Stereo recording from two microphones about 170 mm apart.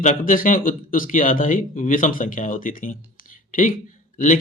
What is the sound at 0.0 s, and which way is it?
Speech, 50° left (ahead or behind).